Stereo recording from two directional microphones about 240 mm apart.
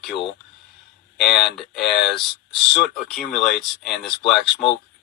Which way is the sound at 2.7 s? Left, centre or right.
Left.